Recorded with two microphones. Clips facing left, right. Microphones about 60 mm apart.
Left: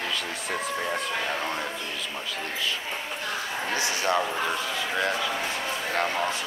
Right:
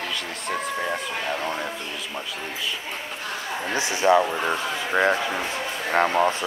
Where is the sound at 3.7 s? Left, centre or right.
Right.